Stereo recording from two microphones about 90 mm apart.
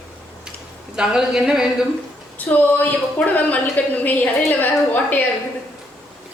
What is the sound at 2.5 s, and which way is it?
Speech, 20° left (ahead or behind).